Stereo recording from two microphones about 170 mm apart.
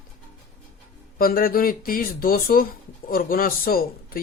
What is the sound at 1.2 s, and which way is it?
Speech, 60° left (ahead or behind).